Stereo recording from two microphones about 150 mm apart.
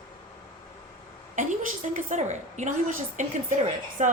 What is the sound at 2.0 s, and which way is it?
A woman's voice, 50° right (ahead or behind).